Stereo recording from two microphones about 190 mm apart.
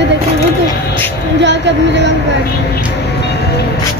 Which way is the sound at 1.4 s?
65° right (ahead or behind).